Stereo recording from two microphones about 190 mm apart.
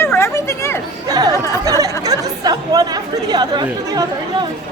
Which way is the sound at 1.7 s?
20° right (ahead or behind).